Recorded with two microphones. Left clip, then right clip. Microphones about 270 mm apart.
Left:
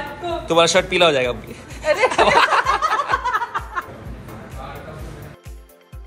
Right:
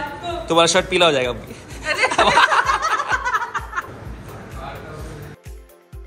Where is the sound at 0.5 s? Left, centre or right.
Centre.